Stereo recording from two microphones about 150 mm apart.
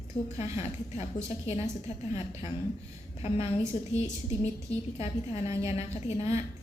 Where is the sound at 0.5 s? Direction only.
45° left (ahead or behind).